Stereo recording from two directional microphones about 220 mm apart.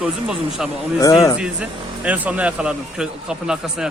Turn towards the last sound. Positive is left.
turn(degrees=-5)  # may be behind; listen again after turning